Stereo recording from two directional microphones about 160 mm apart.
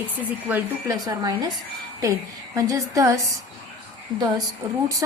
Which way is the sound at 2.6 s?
20° right (ahead or behind).